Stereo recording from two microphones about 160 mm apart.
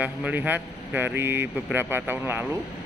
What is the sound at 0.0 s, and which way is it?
Speech, 10° right (ahead or behind).